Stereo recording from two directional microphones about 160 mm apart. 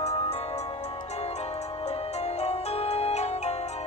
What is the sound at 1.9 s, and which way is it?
Music, 40° left (ahead or behind).